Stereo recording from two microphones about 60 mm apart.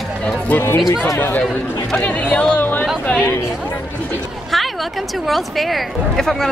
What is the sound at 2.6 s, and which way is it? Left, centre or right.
Chatter, left.